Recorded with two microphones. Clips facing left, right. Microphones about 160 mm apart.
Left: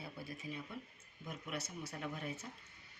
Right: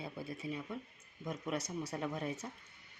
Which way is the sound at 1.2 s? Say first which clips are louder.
Right 6 dB; 40° right (ahead or behind).